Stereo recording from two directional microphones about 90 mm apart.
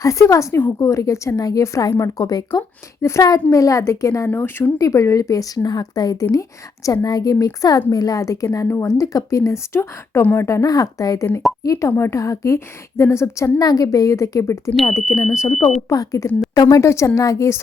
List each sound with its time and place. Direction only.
0.0 s a woman's voice: 35° left (ahead or behind)
4.3 s speech: 25° left (ahead or behind)
4.8 s a woman's voice: 35° left (ahead or behind)
13.6 s a woman's voice: 45° left (ahead or behind)